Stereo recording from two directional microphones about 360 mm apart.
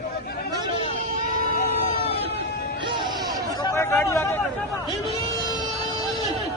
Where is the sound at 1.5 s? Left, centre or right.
Centre.